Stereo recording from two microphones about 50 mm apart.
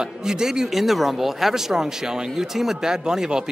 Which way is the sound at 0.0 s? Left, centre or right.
Centre.